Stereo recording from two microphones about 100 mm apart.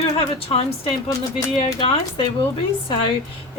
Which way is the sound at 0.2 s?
70° left (ahead or behind).